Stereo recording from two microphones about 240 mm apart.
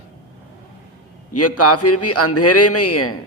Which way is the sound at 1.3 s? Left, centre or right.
Left.